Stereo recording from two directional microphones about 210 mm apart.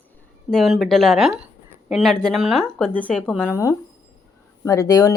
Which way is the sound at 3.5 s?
15° left (ahead or behind).